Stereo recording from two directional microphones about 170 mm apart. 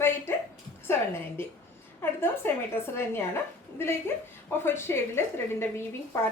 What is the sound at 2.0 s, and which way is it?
A woman's voice, 15° left (ahead or behind).